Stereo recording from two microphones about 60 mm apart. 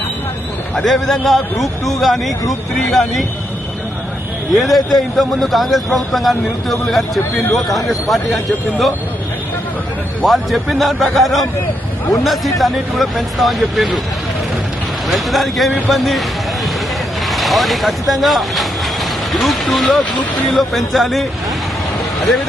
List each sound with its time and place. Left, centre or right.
0.8 s a man's voice: centre
4.5 s a man's voice: centre
10.2 s a man's voice: centre
15.1 s a man's voice: centre
17.2 s a man's voice: centre